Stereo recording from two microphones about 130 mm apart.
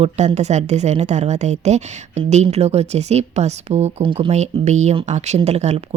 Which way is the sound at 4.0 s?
45° right (ahead or behind).